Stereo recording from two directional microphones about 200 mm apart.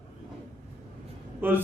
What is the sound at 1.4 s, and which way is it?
Speech, 10° right (ahead or behind).